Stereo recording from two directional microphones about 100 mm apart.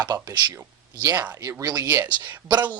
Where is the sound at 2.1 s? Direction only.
50° right (ahead or behind).